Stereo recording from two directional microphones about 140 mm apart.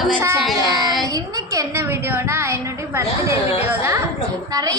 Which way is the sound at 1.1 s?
25° right (ahead or behind).